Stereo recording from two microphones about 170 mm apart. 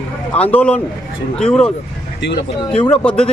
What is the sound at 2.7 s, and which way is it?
Speech, 5° left (ahead or behind).